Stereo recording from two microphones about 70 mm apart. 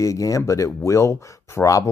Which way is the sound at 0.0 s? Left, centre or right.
Left.